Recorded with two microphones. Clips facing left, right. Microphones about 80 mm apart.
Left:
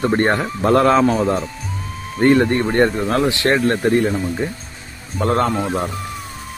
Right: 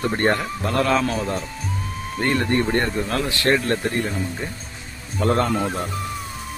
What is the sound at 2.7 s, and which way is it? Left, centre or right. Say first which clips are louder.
Speech: left 6 dB; left.